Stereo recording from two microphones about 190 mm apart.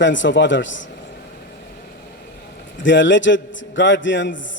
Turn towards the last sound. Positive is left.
turn(degrees=75)  # may be behind; listen again after turning